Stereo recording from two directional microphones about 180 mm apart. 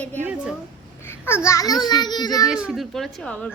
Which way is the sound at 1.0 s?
15° left (ahead or behind).